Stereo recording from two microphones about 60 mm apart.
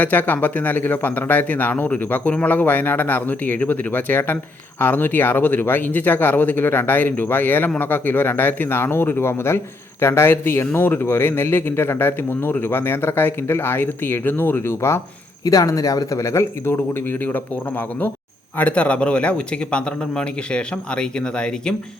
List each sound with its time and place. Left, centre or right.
0.0 s a man's voice: left
15.4 s speech: left; by 21.8 s centre